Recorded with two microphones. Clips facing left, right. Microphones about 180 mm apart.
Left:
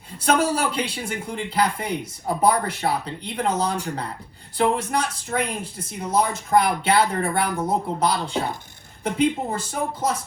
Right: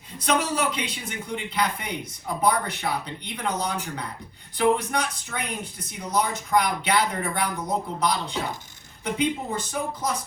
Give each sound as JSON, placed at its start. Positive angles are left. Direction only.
{"t": 0.3, "sound": "speech", "side_deg": 30}